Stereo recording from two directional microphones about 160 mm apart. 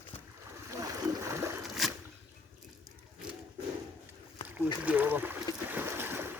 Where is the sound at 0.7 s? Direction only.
20° right (ahead or behind).